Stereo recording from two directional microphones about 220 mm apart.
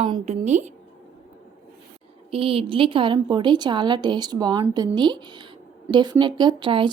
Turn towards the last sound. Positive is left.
turn(degrees=-20)  # may be behind; listen again after turning